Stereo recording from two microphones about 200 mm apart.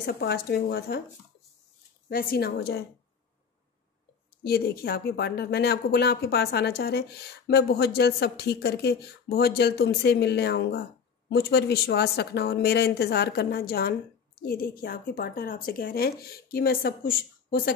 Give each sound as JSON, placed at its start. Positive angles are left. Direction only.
{"t": 0.0, "sound": "speech", "side_deg": 50}
{"t": 2.0, "sound": "speech", "side_deg": 50}
{"t": 4.4, "sound": "speech", "side_deg": 50}